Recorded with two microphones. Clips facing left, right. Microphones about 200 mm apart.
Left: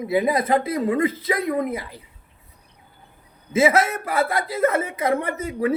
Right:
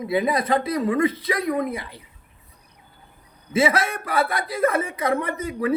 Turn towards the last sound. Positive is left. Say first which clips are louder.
# left 1 dB
turn(degrees=30)  # may be behind; listen again after turning